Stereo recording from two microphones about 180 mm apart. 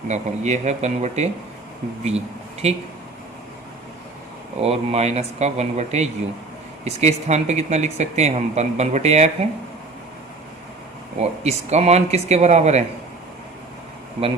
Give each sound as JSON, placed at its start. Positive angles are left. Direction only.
{"t": 0.1, "sound": "speech", "side_deg": -40}
{"t": 4.6, "sound": "speech", "side_deg": -35}
{"t": 11.2, "sound": "speech", "side_deg": -35}